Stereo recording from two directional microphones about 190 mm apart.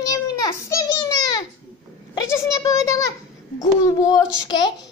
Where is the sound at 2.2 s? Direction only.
15° left (ahead or behind).